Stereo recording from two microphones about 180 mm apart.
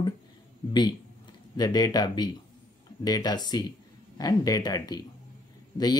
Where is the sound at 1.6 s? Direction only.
20° left (ahead or behind).